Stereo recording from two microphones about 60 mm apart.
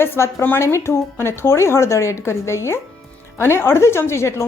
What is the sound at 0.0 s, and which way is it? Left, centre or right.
A woman's voice, left.